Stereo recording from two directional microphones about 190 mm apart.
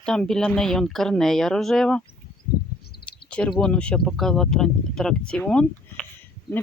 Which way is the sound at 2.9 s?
55° left (ahead or behind).